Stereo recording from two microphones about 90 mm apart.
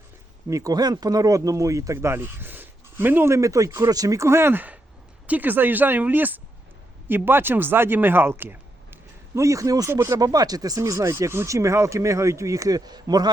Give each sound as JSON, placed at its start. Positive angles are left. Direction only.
{"t": 0.4, "sound": "speech", "side_deg": -40}